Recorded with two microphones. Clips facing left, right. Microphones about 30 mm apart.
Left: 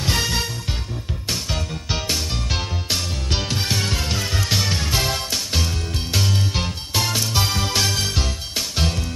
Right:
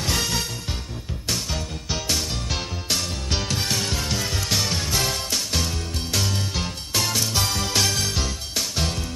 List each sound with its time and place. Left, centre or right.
0.0 s music: centre